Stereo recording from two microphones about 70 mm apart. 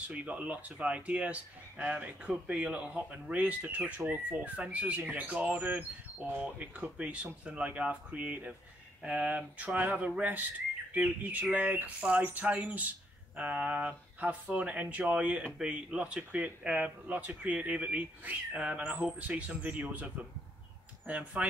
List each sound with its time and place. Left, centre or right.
0.1 s speech: right
21.1 s speech: right